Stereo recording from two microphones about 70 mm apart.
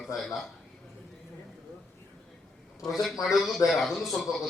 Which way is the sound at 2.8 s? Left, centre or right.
Centre.